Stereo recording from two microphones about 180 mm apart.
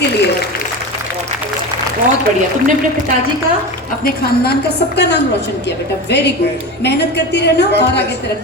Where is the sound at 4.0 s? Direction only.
60° left (ahead or behind).